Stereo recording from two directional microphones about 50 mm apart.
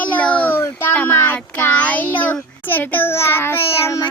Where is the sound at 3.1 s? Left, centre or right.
Left.